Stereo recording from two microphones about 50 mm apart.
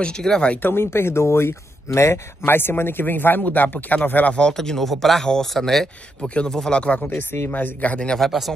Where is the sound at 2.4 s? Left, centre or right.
Left.